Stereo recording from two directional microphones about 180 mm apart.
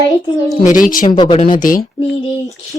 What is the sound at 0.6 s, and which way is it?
Speech, 45° left (ahead or behind).